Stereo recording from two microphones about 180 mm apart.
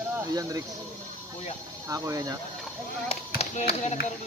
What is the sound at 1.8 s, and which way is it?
Speech, 20° right (ahead or behind).